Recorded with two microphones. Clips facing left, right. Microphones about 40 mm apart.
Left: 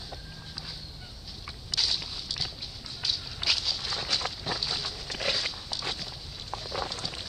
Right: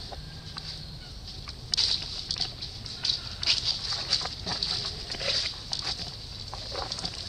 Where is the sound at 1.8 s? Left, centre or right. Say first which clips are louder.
Even; centre.